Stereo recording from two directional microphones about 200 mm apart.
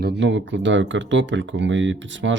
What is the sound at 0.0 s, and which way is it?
Speech, 60° right (ahead or behind).